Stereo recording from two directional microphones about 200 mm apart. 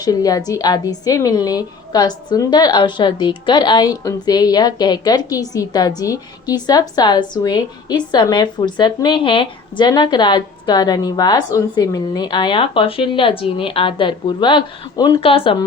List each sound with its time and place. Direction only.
0.0 s a woman's voice: 20° left (ahead or behind)